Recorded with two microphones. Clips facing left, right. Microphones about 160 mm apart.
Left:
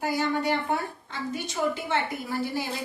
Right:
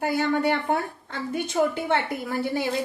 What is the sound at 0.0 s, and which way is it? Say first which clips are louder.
A woman's voice: right 3 dB; 55° right (ahead or behind).